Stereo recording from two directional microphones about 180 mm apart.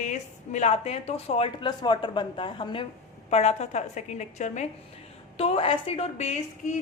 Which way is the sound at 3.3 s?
40° left (ahead or behind).